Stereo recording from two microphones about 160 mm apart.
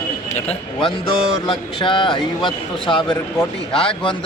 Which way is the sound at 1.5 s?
30° left (ahead or behind).